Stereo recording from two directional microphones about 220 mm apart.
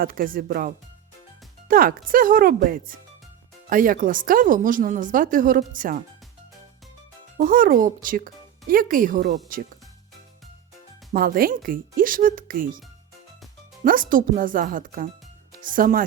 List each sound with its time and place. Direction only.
0.0 s speech: 40° right (ahead or behind)
7.3 s speech: 40° right (ahead or behind)
11.1 s speech: 40° right (ahead or behind)
13.8 s speech: 40° right (ahead or behind)